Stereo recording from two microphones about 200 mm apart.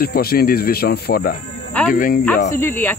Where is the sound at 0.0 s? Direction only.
50° left (ahead or behind).